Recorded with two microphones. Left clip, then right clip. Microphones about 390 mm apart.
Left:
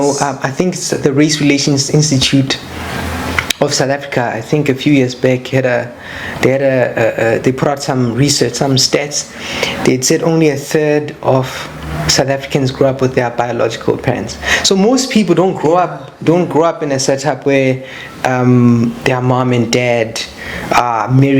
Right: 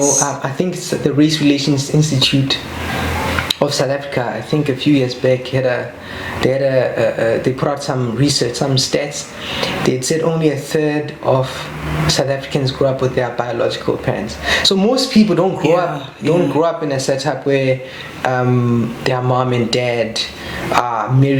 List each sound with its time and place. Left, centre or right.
0.2 s speech: left
18.2 s a sound: left
19.0 s speech: left